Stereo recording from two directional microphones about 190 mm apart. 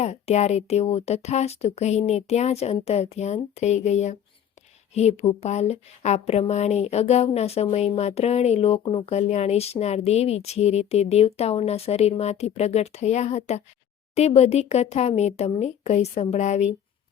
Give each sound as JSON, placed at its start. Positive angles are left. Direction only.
{"t": 0.0, "sound": "speech", "side_deg": 35}